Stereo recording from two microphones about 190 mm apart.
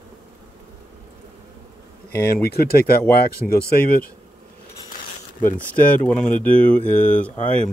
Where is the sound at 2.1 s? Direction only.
55° left (ahead or behind).